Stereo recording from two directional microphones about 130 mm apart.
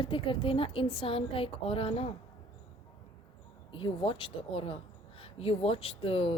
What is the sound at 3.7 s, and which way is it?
Speech, 40° left (ahead or behind).